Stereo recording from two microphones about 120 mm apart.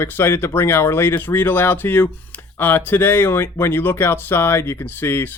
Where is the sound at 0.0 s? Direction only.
20° left (ahead or behind).